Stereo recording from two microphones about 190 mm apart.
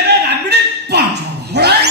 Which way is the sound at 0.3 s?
60° right (ahead or behind).